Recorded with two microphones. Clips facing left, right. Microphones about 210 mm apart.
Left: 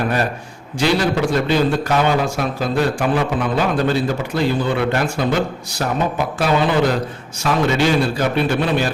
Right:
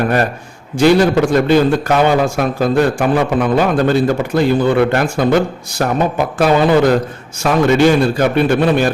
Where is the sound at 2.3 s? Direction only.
50° right (ahead or behind).